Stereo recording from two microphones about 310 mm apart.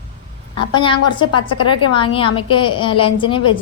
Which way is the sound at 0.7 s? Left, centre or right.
Centre.